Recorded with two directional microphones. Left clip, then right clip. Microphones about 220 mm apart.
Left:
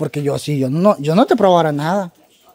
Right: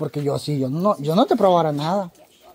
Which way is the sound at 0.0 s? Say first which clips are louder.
Left 4 dB; 20° left (ahead or behind).